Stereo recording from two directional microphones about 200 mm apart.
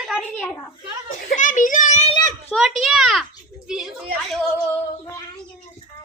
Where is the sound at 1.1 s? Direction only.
40° left (ahead or behind).